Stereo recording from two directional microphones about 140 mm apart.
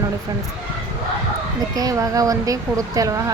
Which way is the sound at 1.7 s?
25° right (ahead or behind).